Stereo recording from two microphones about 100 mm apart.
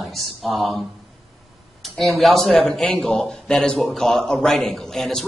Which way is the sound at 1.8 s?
Centre (ahead or behind).